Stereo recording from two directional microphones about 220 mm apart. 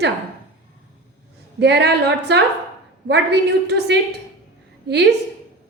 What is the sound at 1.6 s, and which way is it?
A woman's voice, 50° right (ahead or behind).